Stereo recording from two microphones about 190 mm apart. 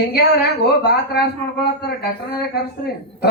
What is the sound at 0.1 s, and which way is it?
Speech, 60° left (ahead or behind).